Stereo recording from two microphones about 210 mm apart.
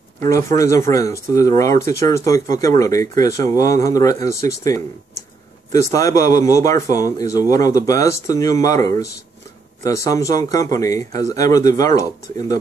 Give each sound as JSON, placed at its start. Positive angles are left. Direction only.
{"t": 0.2, "sound": "a man's voice", "side_deg": 15}